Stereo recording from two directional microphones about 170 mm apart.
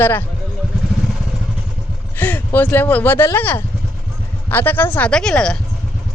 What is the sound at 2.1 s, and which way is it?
Speech, 10° left (ahead or behind).